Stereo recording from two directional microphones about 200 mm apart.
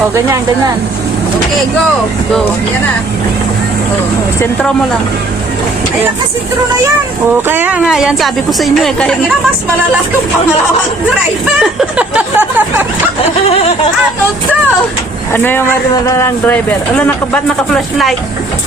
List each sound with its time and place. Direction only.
7.4 s speech: 10° right (ahead or behind)
11.6 s a sound: 5° right (ahead or behind)
13.5 s speech: 30° left (ahead or behind)
15.3 s speech: 10° left (ahead or behind)